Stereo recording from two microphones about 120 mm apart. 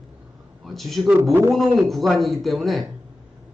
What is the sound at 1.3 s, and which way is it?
Speech, 20° right (ahead or behind).